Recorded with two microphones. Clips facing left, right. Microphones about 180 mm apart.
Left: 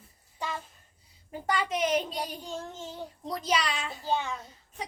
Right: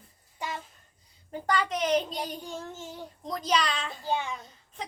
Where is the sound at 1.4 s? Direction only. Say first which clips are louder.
Right 1 dB; 5° left (ahead or behind).